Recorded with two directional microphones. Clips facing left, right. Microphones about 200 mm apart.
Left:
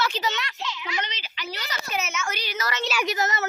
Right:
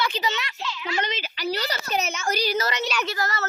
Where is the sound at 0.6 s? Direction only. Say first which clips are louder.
Right 2 dB; 20° left (ahead or behind).